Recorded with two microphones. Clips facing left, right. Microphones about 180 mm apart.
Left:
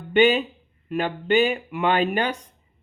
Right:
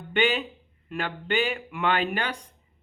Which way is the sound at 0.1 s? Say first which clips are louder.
Left 7 dB; 20° left (ahead or behind).